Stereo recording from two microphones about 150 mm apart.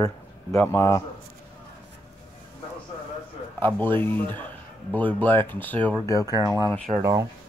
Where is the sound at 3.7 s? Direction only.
15° left (ahead or behind).